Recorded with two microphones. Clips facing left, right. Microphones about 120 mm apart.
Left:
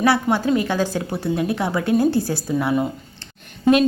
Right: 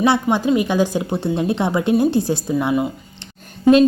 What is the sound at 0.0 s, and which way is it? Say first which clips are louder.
A woman's voice: right 2 dB; 20° right (ahead or behind).